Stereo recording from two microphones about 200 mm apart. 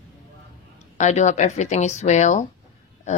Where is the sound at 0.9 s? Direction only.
35° left (ahead or behind).